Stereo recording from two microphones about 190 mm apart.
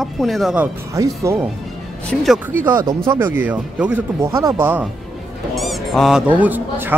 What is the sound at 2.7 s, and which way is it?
Speech, 20° right (ahead or behind).